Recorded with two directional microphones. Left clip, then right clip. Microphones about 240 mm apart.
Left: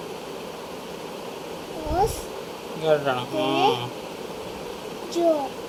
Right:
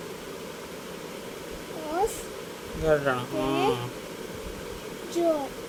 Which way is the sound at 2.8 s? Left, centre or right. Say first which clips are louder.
Left 2 dB; right.